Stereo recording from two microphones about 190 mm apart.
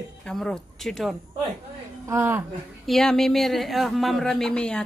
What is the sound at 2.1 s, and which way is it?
Speech, 10° right (ahead or behind).